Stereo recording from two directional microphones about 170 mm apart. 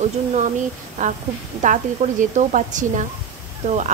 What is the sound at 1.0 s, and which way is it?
Speech, 45° right (ahead or behind).